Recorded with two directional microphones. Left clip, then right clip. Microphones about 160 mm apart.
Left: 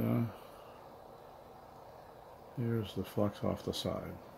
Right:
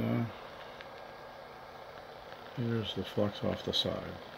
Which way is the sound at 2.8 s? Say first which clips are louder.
Right 3 dB; 5° left (ahead or behind).